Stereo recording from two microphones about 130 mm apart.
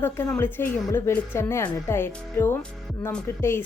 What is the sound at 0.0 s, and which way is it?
A woman's voice, 15° left (ahead or behind).